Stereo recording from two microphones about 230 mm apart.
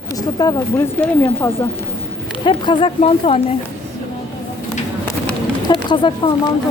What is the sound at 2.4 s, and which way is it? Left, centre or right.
Speech, left.